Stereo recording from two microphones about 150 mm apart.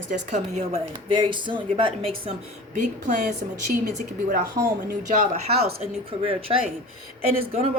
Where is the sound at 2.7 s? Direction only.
55° right (ahead or behind).